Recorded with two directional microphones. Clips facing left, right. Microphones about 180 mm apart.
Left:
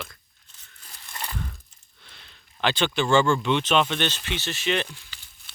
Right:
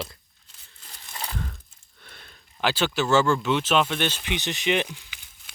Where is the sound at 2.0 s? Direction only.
50° right (ahead or behind).